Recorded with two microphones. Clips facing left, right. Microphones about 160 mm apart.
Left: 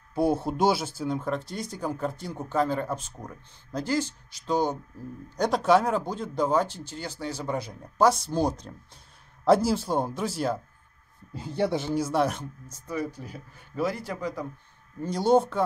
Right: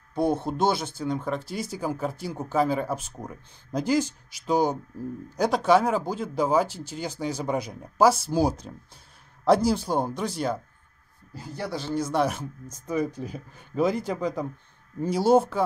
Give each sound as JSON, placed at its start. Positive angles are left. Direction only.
{"t": 0.1, "sound": "speech", "side_deg": 5}
{"t": 11.3, "sound": "speech", "side_deg": 25}
{"t": 11.9, "sound": "speech", "side_deg": 5}
{"t": 12.6, "sound": "speech", "side_deg": -15}
{"t": 15.0, "sound": "speech", "side_deg": -5}